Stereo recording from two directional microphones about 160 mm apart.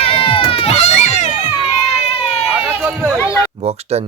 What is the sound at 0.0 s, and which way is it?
Run, 35° left (ahead or behind).